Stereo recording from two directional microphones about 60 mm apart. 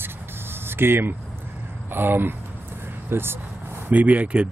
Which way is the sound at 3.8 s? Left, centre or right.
Right.